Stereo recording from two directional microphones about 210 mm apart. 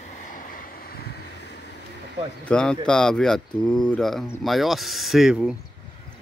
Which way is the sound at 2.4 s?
5° left (ahead or behind).